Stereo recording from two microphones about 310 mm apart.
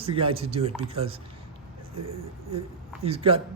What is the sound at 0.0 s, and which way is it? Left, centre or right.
A man's voice, centre.